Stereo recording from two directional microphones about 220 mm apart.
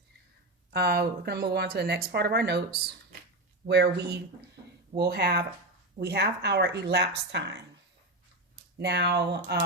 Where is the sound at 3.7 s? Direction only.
50° right (ahead or behind).